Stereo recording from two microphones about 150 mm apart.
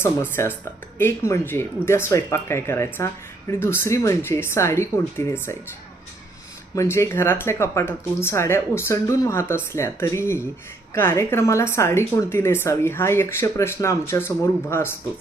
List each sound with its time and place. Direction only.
0.0 s a woman's voice: 15° left (ahead or behind)
6.7 s a woman's voice: 20° left (ahead or behind)